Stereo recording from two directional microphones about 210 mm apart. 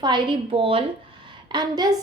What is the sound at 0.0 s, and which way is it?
A woman's voice, 20° right (ahead or behind).